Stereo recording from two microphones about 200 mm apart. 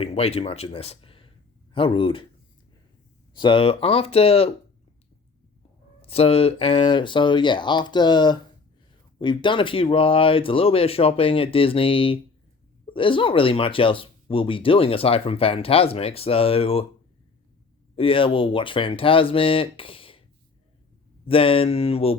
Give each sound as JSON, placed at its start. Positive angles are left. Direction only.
{"t": 0.0, "sound": "speech", "side_deg": 30}
{"t": 3.3, "sound": "speech", "side_deg": 25}
{"t": 6.0, "sound": "speech", "side_deg": 30}
{"t": 17.9, "sound": "speech", "side_deg": 25}
{"t": 21.2, "sound": "speech", "side_deg": 25}